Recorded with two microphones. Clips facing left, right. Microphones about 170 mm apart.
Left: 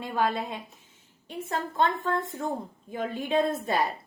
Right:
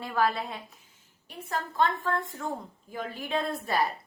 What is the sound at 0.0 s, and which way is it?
A woman's voice, 20° left (ahead or behind).